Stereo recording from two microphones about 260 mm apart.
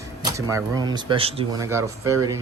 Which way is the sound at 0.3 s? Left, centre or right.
Centre.